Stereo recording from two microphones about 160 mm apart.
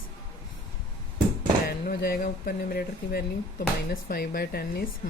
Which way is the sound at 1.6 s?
70° left (ahead or behind).